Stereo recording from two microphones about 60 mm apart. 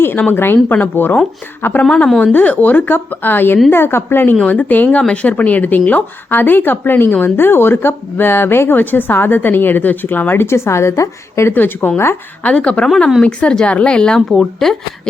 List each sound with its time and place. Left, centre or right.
0.0 s speech: left
2.2 s speech: left
4.4 s speech: left
11.5 s speech: left
12.4 s speech: centre